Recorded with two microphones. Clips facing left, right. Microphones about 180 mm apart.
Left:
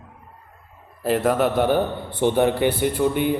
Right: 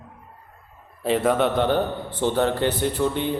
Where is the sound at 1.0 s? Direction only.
5° left (ahead or behind).